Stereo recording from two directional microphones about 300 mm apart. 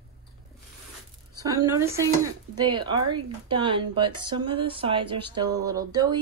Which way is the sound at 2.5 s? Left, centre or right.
Centre.